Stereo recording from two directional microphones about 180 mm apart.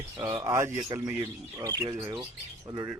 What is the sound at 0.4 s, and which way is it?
Speech, 15° right (ahead or behind).